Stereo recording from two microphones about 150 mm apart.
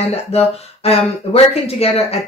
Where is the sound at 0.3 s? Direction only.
45° left (ahead or behind).